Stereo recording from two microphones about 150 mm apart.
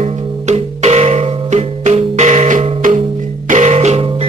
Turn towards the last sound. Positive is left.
turn(degrees=-45)  # may be behind; listen again after turning